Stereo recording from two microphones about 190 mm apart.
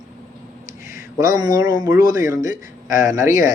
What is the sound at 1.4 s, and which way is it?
Speech, 20° right (ahead or behind).